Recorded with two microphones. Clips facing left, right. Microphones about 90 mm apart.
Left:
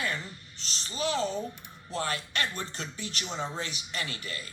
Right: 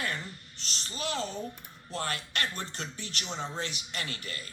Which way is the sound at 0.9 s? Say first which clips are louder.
Left 5 dB; 20° left (ahead or behind).